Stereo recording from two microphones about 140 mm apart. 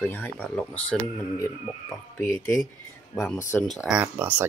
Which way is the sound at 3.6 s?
Centre (ahead or behind).